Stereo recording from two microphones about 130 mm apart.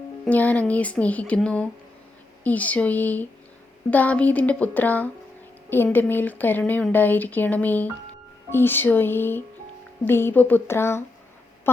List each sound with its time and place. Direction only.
0.3 s speech: 10° left (ahead or behind)